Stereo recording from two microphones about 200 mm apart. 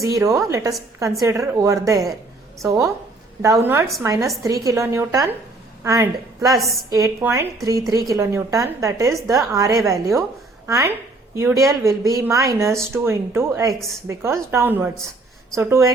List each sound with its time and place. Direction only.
0.0 s a woman's voice: 15° right (ahead or behind)
6.5 s a woman's voice: centre (ahead or behind)
6.9 s speech: 15° right (ahead or behind)